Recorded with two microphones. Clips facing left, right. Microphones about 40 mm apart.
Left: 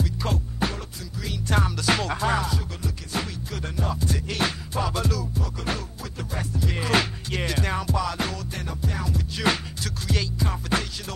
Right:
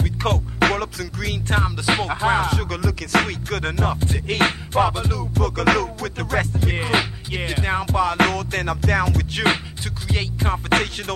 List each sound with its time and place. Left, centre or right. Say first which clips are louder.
0.0 s music: right 5 dB; right
1.5 s music: right 2 dB; right
2.3 s music: right 6 dB; right
2.7 s music: right 10 dB; right
4.9 s music: right 1 dB; right
5.3 s music: right 11 dB; right
6.5 s music: right 4 dB; right
6.8 s music: right 1 dB; right
7.8 s music: right 6 dB; right
8.2 s music: right 11 dB; right
10.4 s music: right 11 dB; right